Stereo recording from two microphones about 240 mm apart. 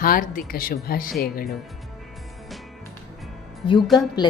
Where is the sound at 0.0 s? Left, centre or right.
Left.